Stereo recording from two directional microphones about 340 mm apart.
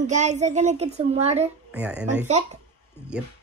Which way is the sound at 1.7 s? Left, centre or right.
Centre.